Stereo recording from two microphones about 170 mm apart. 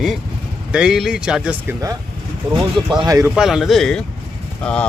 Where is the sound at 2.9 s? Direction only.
20° right (ahead or behind).